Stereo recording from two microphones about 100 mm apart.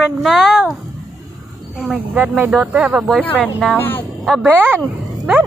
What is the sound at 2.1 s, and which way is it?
Speech, 20° right (ahead or behind).